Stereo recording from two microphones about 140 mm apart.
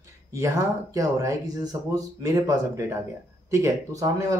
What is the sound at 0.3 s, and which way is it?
A man's voice, 20° right (ahead or behind).